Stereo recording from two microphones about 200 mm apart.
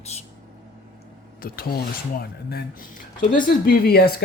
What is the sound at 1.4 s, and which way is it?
Speech, 50° left (ahead or behind).